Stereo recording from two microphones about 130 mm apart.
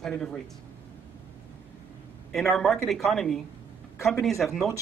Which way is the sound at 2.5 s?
Centre (ahead or behind).